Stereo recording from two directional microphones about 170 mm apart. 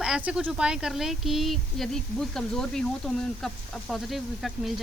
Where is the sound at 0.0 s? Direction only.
5° right (ahead or behind).